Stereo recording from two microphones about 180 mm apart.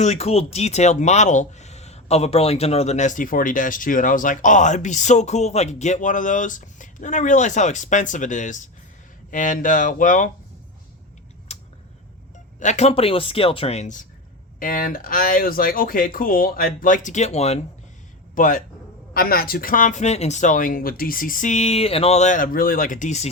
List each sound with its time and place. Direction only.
0.0 s speech: 35° left (ahead or behind)
11.5 s a sound: 35° left (ahead or behind)
12.5 s speech: 40° left (ahead or behind)
18.3 s speech: 50° left (ahead or behind)